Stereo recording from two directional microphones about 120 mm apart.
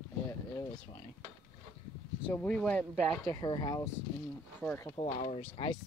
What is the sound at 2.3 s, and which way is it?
Speech, 10° left (ahead or behind).